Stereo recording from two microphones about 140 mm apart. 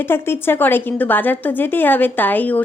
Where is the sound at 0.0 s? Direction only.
15° left (ahead or behind).